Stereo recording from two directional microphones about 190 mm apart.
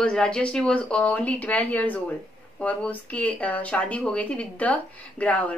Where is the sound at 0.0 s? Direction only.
5° left (ahead or behind).